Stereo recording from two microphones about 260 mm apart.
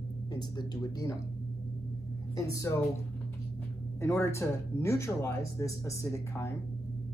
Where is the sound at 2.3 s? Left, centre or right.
Centre.